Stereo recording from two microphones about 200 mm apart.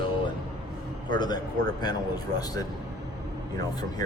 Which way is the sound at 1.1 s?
20° left (ahead or behind).